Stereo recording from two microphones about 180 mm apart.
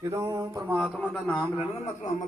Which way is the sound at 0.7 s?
Centre (ahead or behind).